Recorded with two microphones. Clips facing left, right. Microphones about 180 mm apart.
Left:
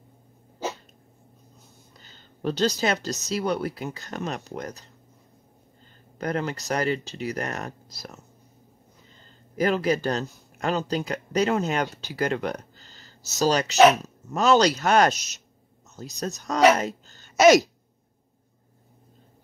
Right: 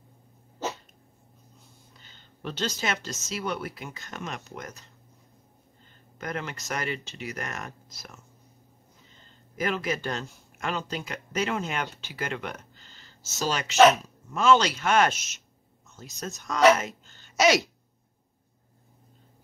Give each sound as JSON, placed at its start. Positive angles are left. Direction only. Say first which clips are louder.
{"t": 2.0, "sound": "a sound", "louder": "left 7 dB", "side_deg": 40}
{"t": 3.3, "sound": "speech", "louder": "left 6 dB", "side_deg": 35}
{"t": 6.1, "sound": "speech", "louder": "left 7 dB", "side_deg": 35}
{"t": 9.6, "sound": "speech", "louder": "left 6 dB", "side_deg": 35}